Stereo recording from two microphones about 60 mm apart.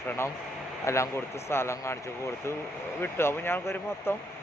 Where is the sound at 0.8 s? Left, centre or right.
Left.